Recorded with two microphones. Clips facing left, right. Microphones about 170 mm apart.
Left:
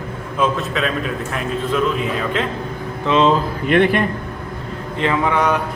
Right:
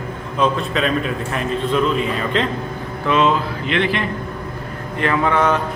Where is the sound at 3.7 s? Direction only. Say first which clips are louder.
Left 6 dB; 50° left (ahead or behind).